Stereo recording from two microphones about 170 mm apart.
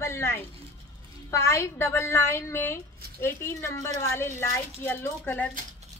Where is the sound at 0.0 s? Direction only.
15° left (ahead or behind).